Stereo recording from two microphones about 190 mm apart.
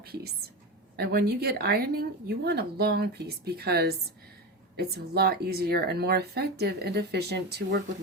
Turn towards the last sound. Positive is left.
turn(degrees=-60)  # may be behind; listen again after turning